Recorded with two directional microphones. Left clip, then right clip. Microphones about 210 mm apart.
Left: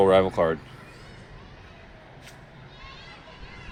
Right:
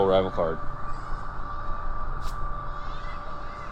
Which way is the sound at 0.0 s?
25° left (ahead or behind).